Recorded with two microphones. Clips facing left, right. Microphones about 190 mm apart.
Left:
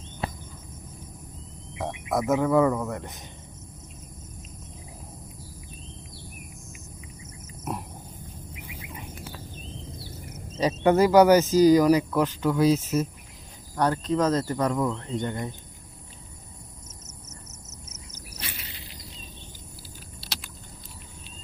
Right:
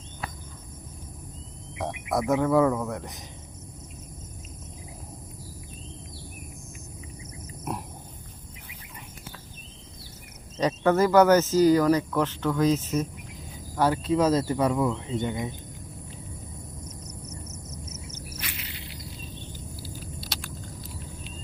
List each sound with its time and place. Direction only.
0.2 s cricket: 25° left (ahead or behind)
1.8 s speech: centre (ahead or behind)
7.7 s dog: centre (ahead or behind)
10.7 s speech: 15° left (ahead or behind)
13.7 s speech: 5° right (ahead or behind)
18.3 s a sound: 30° left (ahead or behind)